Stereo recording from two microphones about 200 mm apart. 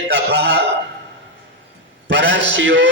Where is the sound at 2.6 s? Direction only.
65° right (ahead or behind).